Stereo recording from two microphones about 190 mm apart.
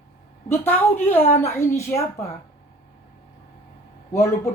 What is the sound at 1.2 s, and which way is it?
Speech, 35° left (ahead or behind).